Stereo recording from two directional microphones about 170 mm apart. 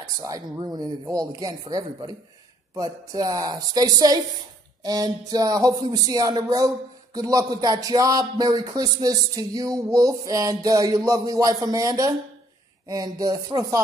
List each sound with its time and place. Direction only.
0.0 s speech: 20° right (ahead or behind)